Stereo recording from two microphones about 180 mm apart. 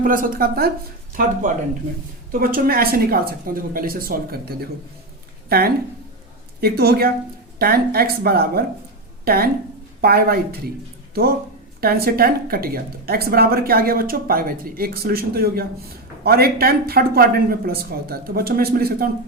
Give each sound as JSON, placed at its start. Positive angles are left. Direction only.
{"t": 0.0, "sound": "a woman's voice", "side_deg": -50}
{"t": 2.3, "sound": "a woman's voice", "side_deg": -55}